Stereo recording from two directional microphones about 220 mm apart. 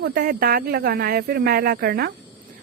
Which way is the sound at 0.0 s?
40° right (ahead or behind).